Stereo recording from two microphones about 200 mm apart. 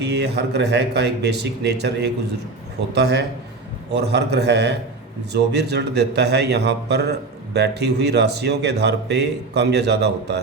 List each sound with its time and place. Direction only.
0.1 s speech: 55° right (ahead or behind)